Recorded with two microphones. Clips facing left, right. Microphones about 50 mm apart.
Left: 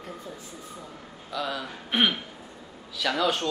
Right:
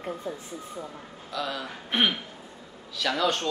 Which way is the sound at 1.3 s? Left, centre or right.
Centre.